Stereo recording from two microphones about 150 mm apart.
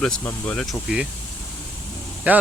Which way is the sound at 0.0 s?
5° left (ahead or behind).